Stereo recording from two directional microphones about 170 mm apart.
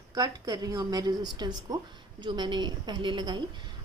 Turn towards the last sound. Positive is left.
turn(degrees=-25)  # may be behind; listen again after turning